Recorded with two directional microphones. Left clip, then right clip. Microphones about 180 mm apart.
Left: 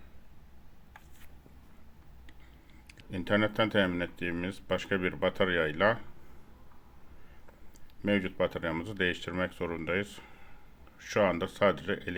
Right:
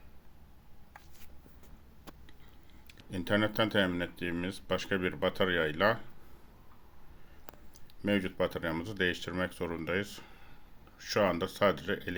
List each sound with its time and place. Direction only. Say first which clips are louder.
2.8 s speech: left 1 dB; 5° left (ahead or behind)
8.0 s speech: left 2 dB; centre (ahead or behind)